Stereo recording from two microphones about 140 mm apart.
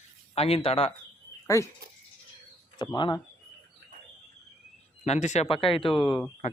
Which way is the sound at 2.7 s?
35° left (ahead or behind).